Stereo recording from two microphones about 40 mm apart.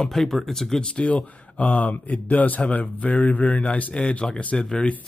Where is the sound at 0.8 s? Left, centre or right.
Left.